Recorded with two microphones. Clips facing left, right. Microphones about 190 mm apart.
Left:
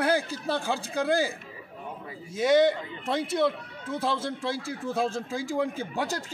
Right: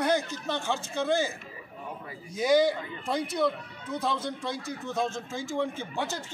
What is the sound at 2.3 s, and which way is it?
Speech, centre (ahead or behind).